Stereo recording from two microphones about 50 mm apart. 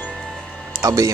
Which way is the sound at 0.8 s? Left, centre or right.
Right.